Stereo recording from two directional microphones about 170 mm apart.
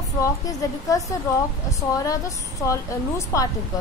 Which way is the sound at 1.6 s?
20° left (ahead or behind).